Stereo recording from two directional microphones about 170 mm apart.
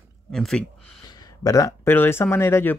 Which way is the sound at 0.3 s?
Centre (ahead or behind).